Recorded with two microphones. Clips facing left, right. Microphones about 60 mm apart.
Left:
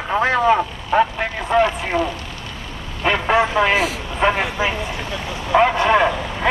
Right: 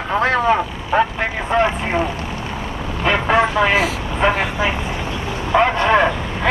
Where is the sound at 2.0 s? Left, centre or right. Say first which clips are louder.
Left 1 dB; right.